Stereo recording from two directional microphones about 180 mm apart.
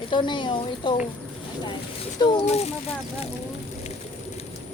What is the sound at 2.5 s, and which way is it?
Speech, 35° left (ahead or behind).